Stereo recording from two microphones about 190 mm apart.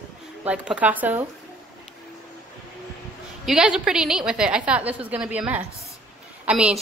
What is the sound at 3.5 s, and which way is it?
A woman's voice, 5° right (ahead or behind).